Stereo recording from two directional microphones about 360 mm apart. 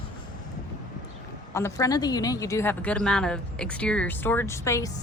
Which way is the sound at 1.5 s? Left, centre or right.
Centre.